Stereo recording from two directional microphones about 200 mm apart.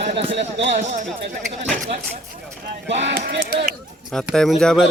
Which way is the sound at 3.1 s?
50° right (ahead or behind).